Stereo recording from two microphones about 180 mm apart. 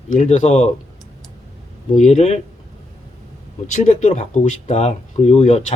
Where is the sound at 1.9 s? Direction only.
40° left (ahead or behind).